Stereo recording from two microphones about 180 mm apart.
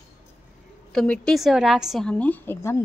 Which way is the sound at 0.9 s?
5° left (ahead or behind).